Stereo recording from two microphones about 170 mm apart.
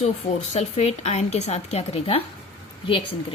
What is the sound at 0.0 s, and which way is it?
A woman's voice, 40° left (ahead or behind).